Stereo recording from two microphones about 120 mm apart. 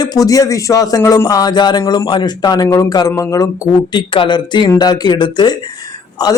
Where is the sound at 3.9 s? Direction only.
40° left (ahead or behind).